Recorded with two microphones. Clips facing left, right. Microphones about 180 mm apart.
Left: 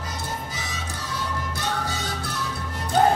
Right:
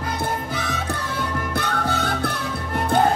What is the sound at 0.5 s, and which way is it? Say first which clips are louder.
Music: right 8 dB; 60° right (ahead or behind).